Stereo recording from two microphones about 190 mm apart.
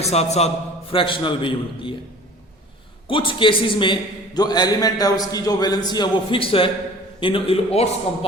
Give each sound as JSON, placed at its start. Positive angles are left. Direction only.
{"t": 0.0, "sound": "a man's voice", "side_deg": 35}
{"t": 3.1, "sound": "a man's voice", "side_deg": 25}